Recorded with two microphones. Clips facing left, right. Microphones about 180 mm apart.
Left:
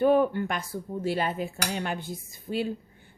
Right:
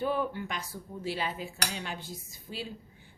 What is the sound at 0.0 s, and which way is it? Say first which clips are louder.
Speech: left 9 dB; 55° left (ahead or behind).